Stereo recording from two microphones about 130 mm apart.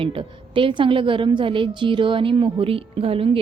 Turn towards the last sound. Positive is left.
turn(degrees=-45)  # may be behind; listen again after turning